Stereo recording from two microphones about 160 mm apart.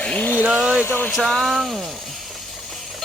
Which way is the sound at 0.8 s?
15° left (ahead or behind).